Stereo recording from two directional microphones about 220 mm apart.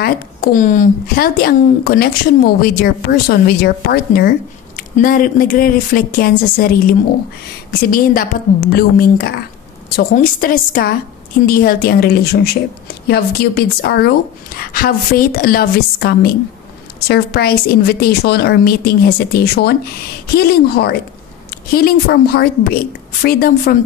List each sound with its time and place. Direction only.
0.0 s a woman's voice: 40° left (ahead or behind)